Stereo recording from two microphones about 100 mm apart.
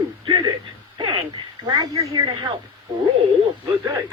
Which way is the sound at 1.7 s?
40° right (ahead or behind).